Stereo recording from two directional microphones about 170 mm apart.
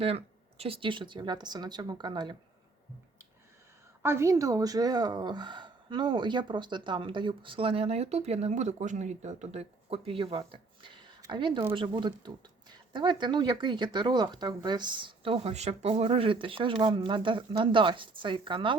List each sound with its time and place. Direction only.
0.6 s speech: 30° right (ahead or behind)
4.0 s speech: 15° right (ahead or behind)